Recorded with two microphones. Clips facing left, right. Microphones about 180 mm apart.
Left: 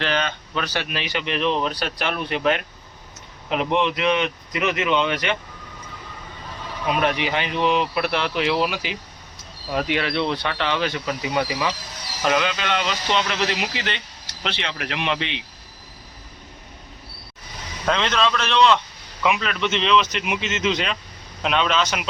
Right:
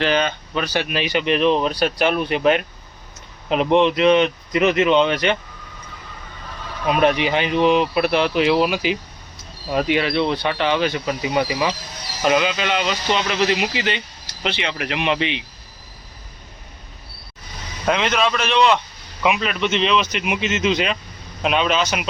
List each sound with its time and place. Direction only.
0.0 s speech: 10° right (ahead or behind); by 5.3 s 30° right (ahead or behind)
7.0 s speech: 20° right (ahead or behind)
17.8 s speech: 10° right (ahead or behind)